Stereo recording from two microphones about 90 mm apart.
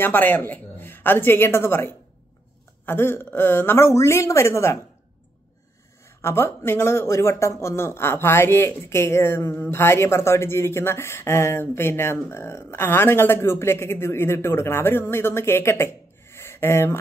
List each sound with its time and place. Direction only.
0.0 s speech: 20° left (ahead or behind)
2.8 s a sound: 25° left (ahead or behind)
3.3 s speech: 25° left (ahead or behind)
6.0 s speech: 30° left (ahead or behind)